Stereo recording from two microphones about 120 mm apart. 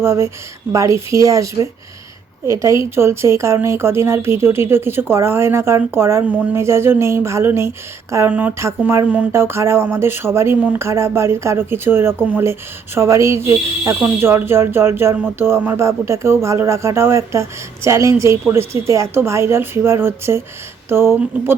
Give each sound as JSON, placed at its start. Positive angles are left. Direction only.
{"t": 0.0, "sound": "speech", "side_deg": -20}